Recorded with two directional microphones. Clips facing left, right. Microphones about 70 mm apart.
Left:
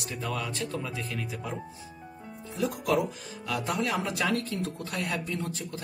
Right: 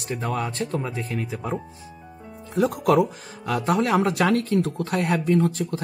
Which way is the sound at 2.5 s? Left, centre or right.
Right.